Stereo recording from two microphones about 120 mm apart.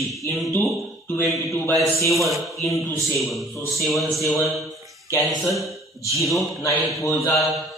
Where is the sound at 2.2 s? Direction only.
Centre (ahead or behind).